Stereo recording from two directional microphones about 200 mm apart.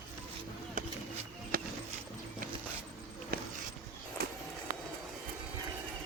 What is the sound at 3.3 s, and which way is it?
Dog, 45° right (ahead or behind).